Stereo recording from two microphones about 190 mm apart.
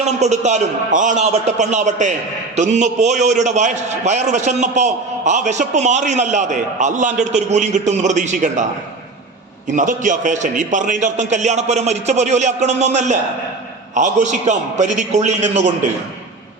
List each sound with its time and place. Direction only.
0.0 s a man's voice: 35° right (ahead or behind)
9.6 s a man's voice: 45° right (ahead or behind)